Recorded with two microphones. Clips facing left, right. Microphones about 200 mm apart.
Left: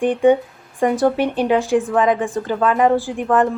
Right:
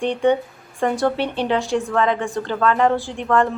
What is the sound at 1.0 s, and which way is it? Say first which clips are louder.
Speech: left 4 dB; 10° left (ahead or behind).